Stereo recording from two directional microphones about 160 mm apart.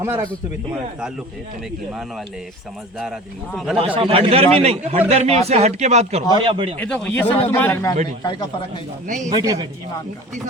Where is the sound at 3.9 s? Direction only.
35° right (ahead or behind).